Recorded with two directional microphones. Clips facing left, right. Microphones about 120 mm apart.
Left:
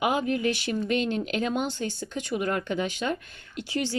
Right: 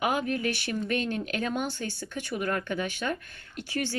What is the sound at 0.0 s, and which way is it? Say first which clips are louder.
Speech: left 3 dB; 20° left (ahead or behind).